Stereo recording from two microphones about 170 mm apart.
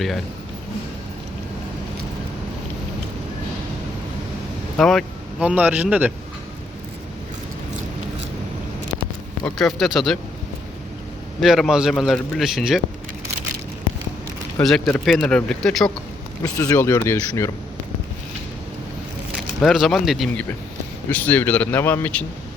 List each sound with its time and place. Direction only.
4.8 s speech: centre (ahead or behind)
9.6 s a man's voice: centre (ahead or behind)
11.3 s a man's voice: centre (ahead or behind)
14.6 s a man's voice: 5° left (ahead or behind)
16.4 s speech: 20° left (ahead or behind)
19.6 s a man's voice: centre (ahead or behind)